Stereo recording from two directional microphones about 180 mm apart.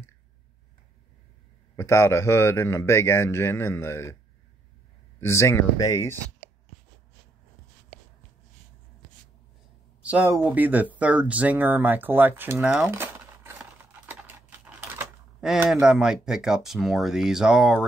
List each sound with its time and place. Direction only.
1.8 s a man's voice: 15° left (ahead or behind)
5.2 s a man's voice: 15° left (ahead or behind)
10.0 s speech: 10° right (ahead or behind)